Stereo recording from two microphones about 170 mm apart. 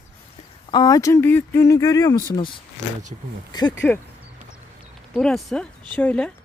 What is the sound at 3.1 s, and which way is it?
Speech, 35° right (ahead or behind).